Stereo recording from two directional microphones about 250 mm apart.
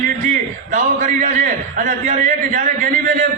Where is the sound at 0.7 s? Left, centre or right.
Right.